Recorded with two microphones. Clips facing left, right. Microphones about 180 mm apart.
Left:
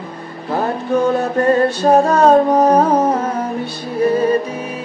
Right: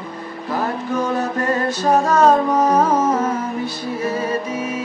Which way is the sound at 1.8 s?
30° left (ahead or behind).